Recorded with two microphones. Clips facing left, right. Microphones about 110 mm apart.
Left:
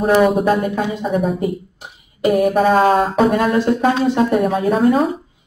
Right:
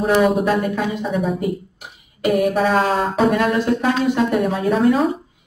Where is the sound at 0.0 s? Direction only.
40° left (ahead or behind).